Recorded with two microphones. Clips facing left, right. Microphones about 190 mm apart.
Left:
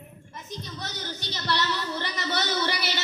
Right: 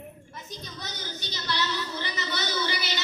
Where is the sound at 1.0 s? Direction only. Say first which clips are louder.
Left 2 dB; 65° left (ahead or behind).